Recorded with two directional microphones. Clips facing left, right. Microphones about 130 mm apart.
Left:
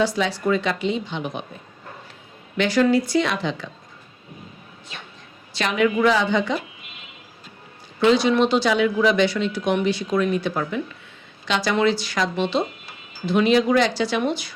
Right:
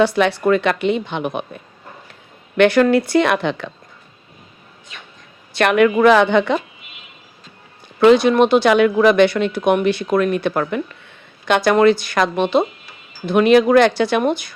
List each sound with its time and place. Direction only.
0.0 s speech: 60° right (ahead or behind)
2.6 s speech: 60° right (ahead or behind)
5.5 s speech: 60° right (ahead or behind)
8.0 s speech: 55° right (ahead or behind)